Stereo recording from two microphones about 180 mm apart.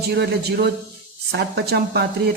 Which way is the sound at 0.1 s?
65° right (ahead or behind).